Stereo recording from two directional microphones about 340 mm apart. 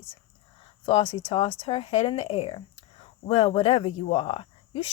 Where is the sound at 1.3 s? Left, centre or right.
Centre.